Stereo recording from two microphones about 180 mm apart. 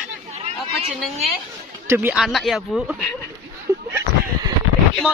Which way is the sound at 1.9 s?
10° right (ahead or behind).